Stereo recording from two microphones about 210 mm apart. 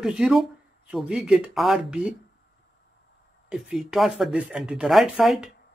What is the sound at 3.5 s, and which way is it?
Speech, centre (ahead or behind).